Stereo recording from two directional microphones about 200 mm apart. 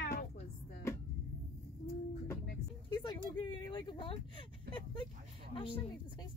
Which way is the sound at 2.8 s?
20° left (ahead or behind).